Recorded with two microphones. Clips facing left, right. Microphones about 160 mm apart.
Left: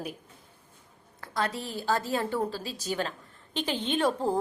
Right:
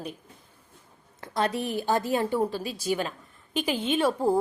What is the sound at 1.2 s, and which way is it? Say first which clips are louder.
A woman's voice: right 4 dB; 20° right (ahead or behind).